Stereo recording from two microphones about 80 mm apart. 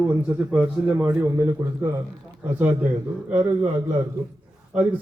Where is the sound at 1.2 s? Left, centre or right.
Right.